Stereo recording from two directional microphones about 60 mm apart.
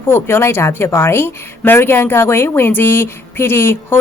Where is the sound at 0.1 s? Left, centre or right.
Left.